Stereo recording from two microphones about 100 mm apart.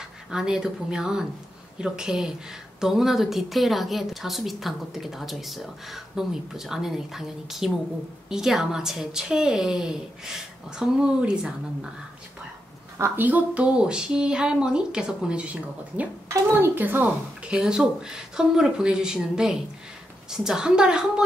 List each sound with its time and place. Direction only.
0.3 s a woman's voice: 5° right (ahead or behind)
12.9 s speech: 20° right (ahead or behind)
16.3 s a woman's voice: 25° right (ahead or behind)
17.6 s a woman's voice: 5° right (ahead or behind)